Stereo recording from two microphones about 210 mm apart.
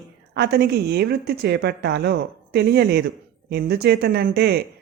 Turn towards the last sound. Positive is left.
turn(degrees=-50)  # may be behind; listen again after turning